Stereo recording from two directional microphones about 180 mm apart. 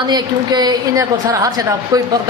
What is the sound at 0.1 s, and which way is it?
A woman's voice, 25° right (ahead or behind).